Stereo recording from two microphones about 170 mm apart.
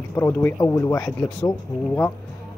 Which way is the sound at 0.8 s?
20° left (ahead or behind).